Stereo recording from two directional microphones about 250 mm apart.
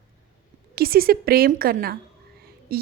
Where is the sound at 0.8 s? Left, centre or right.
Right.